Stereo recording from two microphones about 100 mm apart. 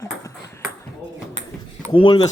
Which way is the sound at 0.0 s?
35° left (ahead or behind).